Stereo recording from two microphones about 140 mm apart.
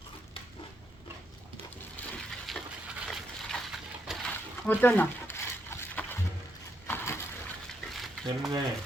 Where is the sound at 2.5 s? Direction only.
Centre (ahead or behind).